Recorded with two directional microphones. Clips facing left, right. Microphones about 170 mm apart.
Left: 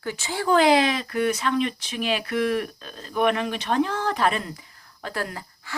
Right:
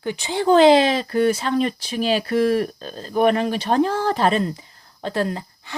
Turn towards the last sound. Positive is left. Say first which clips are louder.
# right 8 dB
turn(degrees=-25)  # may be behind; listen again after turning